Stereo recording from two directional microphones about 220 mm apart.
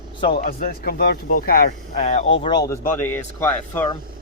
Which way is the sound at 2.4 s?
20° left (ahead or behind).